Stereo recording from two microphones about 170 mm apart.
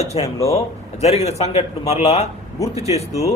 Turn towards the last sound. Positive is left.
turn(degrees=40)  # may be behind; listen again after turning